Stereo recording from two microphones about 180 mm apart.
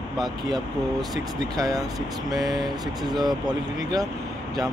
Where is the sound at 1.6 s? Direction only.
20° right (ahead or behind).